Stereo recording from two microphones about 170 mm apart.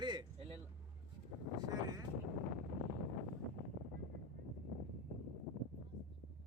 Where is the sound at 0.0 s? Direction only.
25° right (ahead or behind).